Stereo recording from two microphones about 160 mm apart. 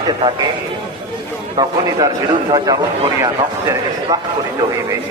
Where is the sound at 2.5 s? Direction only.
25° right (ahead or behind).